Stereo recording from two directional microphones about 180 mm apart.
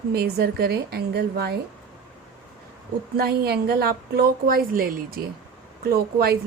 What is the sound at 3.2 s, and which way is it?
A woman's voice, 60° right (ahead or behind).